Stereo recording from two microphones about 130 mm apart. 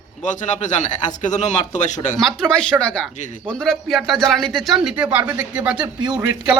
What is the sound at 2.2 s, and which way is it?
A man's voice, 5° left (ahead or behind).